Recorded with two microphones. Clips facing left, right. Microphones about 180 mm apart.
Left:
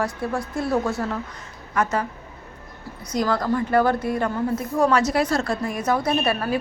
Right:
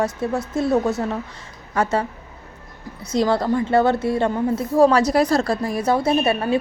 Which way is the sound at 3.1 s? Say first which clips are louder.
Right 3 dB; 25° right (ahead or behind).